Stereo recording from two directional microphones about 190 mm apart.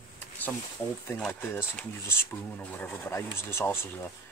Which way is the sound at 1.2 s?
10° left (ahead or behind).